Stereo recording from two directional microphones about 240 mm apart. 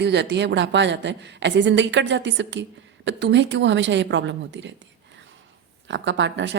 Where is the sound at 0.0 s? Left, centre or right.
Right.